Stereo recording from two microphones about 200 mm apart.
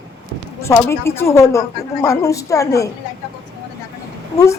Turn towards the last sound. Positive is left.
turn(degrees=15)  # may be behind; listen again after turning